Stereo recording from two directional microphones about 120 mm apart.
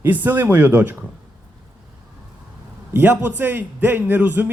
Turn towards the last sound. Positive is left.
turn(degrees=-15)  # may be behind; listen again after turning